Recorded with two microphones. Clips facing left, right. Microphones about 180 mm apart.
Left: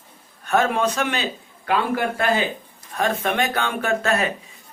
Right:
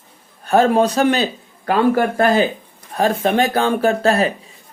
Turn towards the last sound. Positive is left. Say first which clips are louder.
# right 6 dB
turn(degrees=-35)  # may be behind; listen again after turning